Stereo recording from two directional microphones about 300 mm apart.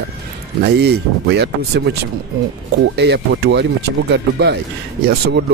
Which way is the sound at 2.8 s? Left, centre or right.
Right.